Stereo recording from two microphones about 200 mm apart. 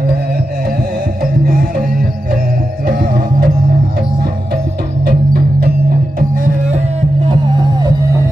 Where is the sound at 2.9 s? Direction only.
50° right (ahead or behind).